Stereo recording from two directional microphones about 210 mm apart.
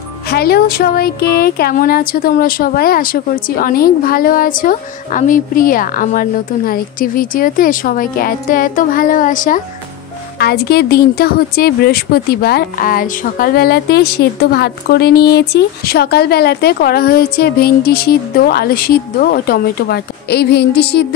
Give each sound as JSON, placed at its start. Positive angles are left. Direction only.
{"t": 0.3, "sound": "a woman's voice", "side_deg": 50}